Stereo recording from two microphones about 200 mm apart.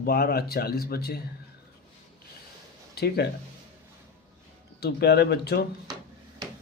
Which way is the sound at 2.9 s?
55° left (ahead or behind).